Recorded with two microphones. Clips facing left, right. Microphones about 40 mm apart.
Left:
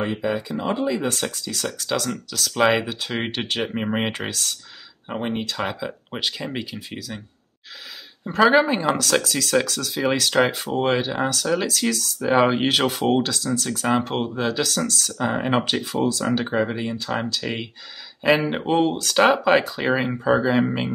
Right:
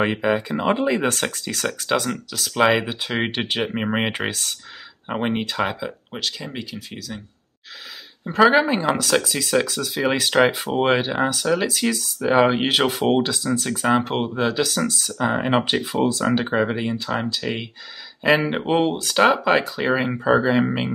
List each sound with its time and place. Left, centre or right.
0.2 s speech: right
2.0 s speech: centre
2.8 s speech: right
4.3 s speech: right
5.6 s speech: centre
6.1 s speech: centre
8.3 s speech: centre
16.0 s speech: right
17.1 s speech: centre
18.7 s speech: centre
20.1 s speech: centre